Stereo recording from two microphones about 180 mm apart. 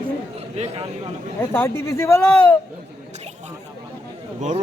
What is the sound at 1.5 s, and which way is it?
Speech, 15° left (ahead or behind).